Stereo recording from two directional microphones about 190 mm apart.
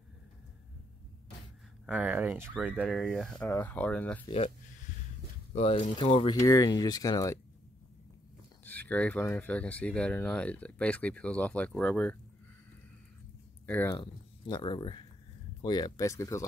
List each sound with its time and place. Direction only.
1.9 s speech: 5° right (ahead or behind)
2.8 s speech: centre (ahead or behind)
5.5 s speech: 30° left (ahead or behind)
8.6 s speech: 10° left (ahead or behind)
13.7 s speech: 10° left (ahead or behind)
13.9 s speech: 25° left (ahead or behind)